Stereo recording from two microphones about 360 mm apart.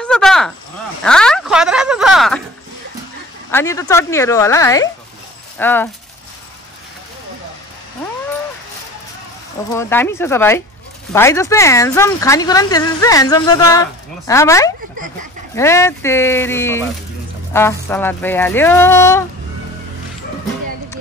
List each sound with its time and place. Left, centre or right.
0.0 s speech: centre
3.5 s speech: centre
9.7 s speech: centre